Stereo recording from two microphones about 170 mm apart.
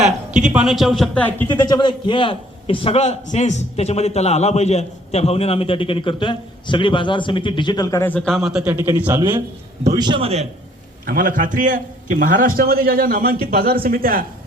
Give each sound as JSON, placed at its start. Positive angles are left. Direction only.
{"t": 0.5, "sound": "speech", "side_deg": -5}
{"t": 1.5, "sound": "a man's voice", "side_deg": 25}
{"t": 9.9, "sound": "a man's voice", "side_deg": -25}
{"t": 11.0, "sound": "a man's voice", "side_deg": -50}